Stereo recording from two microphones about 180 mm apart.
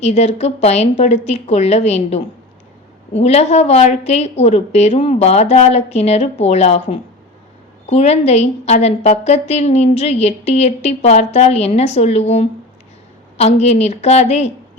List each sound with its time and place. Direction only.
0.0 s a woman's voice: 35° left (ahead or behind)